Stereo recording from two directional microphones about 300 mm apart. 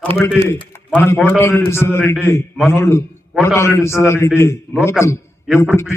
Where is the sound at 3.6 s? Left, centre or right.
Centre.